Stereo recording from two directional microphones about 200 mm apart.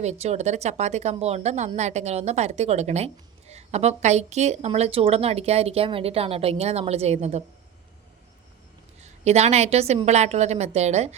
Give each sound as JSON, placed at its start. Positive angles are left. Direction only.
{"t": 0.0, "sound": "speech", "side_deg": -35}
{"t": 9.0, "sound": "speech", "side_deg": -35}